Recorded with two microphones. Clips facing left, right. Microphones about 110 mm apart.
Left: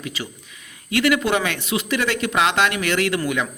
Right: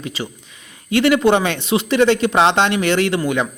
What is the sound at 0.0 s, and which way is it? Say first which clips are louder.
A man's voice: right 4 dB; 30° right (ahead or behind).